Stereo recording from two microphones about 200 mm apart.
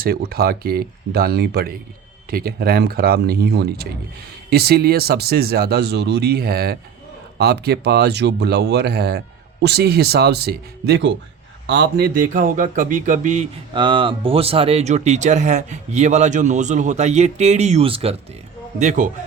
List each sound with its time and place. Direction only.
0.0 s a man's voice: 50° right (ahead or behind); by 18.2 s 30° right (ahead or behind)
18.8 s a man's voice: 40° right (ahead or behind)